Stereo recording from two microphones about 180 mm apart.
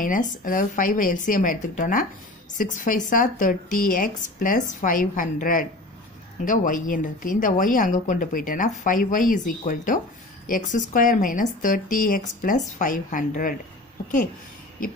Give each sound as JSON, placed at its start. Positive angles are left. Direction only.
{"t": 0.0, "sound": "speech", "side_deg": 50}